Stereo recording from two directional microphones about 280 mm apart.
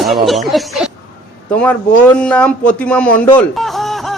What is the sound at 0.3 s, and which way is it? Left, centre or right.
Speech, centre.